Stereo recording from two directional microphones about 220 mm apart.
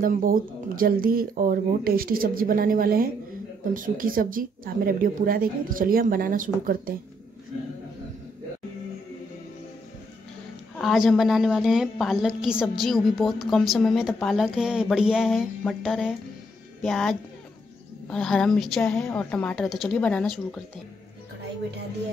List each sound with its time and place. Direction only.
0.0 s speech: 40° right (ahead or behind)
10.8 s a woman's voice: centre (ahead or behind)